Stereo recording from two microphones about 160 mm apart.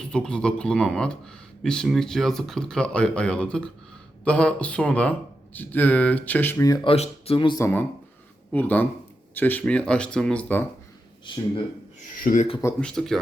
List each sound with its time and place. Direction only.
0.0 s speech: 5° left (ahead or behind)
6.8 s speech: 40° left (ahead or behind)
7.6 s speech: 10° left (ahead or behind)
12.2 s speech: 55° left (ahead or behind)
12.8 s speech: 5° left (ahead or behind)